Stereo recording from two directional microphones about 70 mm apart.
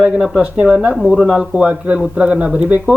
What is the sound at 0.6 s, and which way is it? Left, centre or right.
Speech, centre.